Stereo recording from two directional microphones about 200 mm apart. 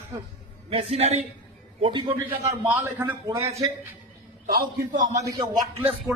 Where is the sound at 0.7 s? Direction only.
30° right (ahead or behind).